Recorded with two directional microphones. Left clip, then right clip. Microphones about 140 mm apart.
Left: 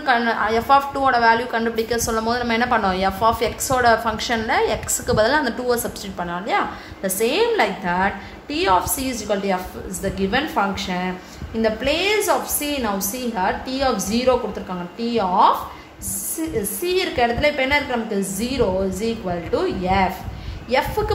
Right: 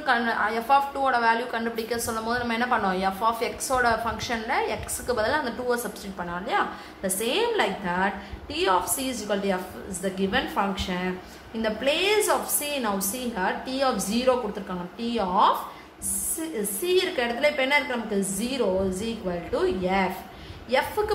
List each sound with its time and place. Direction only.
0.0 s a woman's voice: 30° left (ahead or behind)
16.8 s a woman's voice: 25° left (ahead or behind)